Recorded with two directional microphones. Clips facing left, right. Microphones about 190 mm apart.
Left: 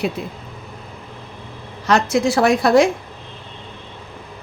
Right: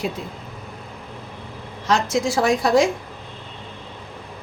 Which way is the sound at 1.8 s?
65° left (ahead or behind).